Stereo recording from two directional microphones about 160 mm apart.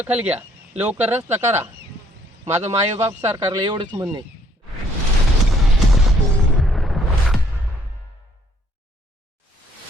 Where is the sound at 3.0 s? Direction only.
20° right (ahead or behind).